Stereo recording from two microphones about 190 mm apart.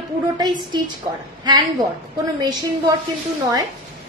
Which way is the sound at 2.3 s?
20° right (ahead or behind).